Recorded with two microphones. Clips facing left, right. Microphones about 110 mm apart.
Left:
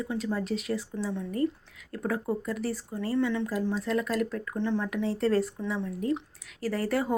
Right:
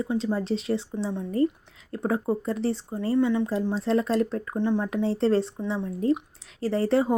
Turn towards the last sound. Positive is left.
turn(degrees=-25)  # may be behind; listen again after turning